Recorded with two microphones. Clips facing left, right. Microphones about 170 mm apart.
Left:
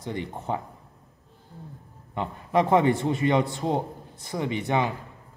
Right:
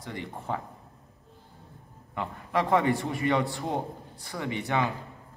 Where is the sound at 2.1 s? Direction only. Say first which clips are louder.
Left 5 dB; 20° left (ahead or behind).